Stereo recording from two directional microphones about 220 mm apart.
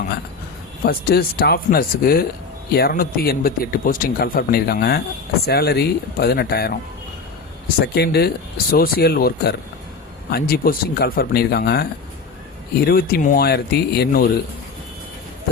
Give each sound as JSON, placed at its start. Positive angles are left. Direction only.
{"t": 0.9, "sound": "speech", "side_deg": 45}
{"t": 7.8, "sound": "speech", "side_deg": 45}